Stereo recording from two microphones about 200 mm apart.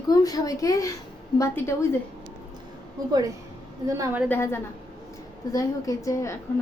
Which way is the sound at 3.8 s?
15° right (ahead or behind).